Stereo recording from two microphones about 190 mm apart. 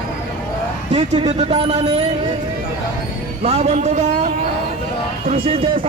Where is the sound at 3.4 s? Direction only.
35° right (ahead or behind).